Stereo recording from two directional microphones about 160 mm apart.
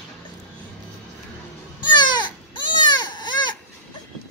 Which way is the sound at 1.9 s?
30° left (ahead or behind).